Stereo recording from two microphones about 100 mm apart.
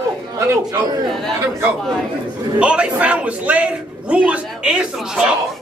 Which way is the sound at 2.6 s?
10° right (ahead or behind).